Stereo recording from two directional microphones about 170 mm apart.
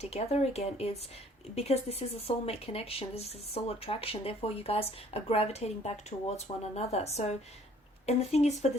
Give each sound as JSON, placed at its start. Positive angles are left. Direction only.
{"t": 0.0, "sound": "speech", "side_deg": 40}